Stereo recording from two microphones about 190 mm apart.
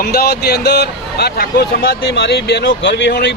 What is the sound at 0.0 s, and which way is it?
A man's voice, 55° left (ahead or behind).